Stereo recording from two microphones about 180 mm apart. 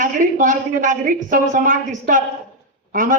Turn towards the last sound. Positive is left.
turn(degrees=-50)  # may be behind; listen again after turning